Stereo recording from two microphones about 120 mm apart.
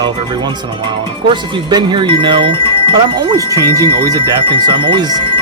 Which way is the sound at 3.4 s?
30° right (ahead or behind).